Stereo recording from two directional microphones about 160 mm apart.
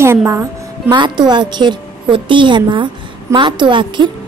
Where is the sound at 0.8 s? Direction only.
30° right (ahead or behind).